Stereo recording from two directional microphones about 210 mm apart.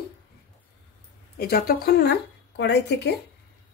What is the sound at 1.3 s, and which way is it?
Speech, 45° left (ahead or behind).